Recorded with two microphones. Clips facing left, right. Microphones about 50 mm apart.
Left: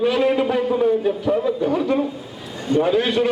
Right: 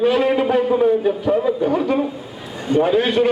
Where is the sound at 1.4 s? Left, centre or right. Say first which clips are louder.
Right 2 dB; right.